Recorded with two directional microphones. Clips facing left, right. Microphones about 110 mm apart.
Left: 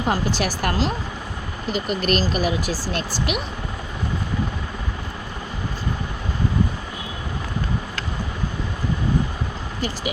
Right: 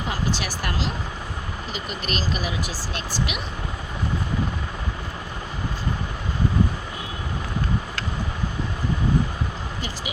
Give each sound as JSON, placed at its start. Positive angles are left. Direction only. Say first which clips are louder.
{"t": 0.1, "sound": "speech", "louder": "left 5 dB", "side_deg": 45}